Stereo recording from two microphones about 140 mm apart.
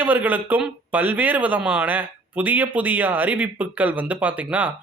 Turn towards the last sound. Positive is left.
turn(degrees=-10)  # may be behind; listen again after turning